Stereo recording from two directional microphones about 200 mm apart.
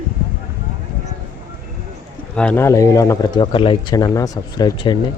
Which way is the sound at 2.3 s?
5° left (ahead or behind).